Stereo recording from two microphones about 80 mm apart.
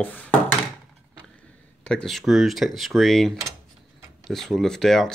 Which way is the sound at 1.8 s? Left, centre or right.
Centre.